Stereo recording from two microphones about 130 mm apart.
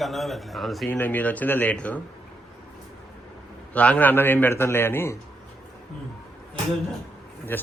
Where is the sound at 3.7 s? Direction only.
10° left (ahead or behind).